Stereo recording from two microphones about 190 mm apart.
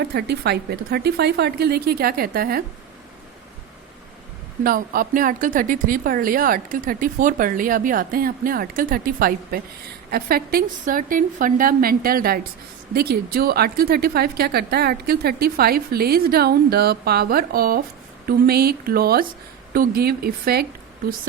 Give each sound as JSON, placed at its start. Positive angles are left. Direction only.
{"t": 0.0, "sound": "a woman's voice", "side_deg": -60}
{"t": 4.6, "sound": "a woman's voice", "side_deg": -50}